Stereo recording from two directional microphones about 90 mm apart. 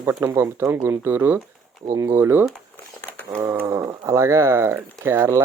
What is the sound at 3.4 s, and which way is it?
Speech, 30° right (ahead or behind).